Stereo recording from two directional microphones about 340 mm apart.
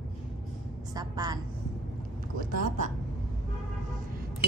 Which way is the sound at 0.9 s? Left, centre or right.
Centre.